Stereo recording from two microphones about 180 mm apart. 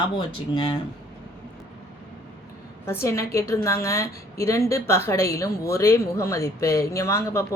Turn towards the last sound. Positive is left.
turn(degrees=15)  # may be behind; listen again after turning